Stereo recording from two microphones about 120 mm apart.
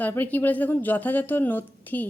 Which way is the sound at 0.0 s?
15° left (ahead or behind).